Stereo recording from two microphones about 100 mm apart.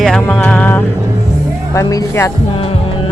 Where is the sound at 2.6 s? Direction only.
70° left (ahead or behind).